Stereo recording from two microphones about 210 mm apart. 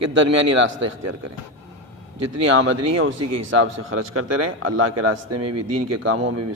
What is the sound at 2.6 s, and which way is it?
Speech, 70° right (ahead or behind).